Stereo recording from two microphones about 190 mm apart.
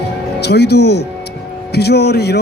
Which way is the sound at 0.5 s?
60° left (ahead or behind).